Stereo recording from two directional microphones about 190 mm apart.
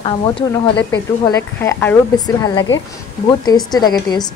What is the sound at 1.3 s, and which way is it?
Speech, 15° left (ahead or behind).